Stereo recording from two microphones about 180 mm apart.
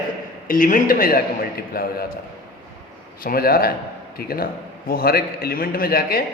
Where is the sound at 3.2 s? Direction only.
55° left (ahead or behind).